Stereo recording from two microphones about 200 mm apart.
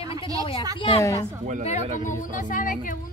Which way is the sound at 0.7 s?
25° left (ahead or behind).